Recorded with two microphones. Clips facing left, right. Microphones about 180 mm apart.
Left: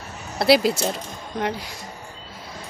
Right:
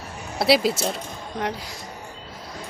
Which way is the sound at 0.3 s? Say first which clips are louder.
Left 2 dB; centre (ahead or behind).